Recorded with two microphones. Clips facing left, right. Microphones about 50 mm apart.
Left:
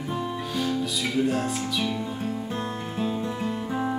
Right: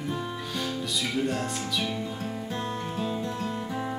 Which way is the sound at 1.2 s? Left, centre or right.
Centre.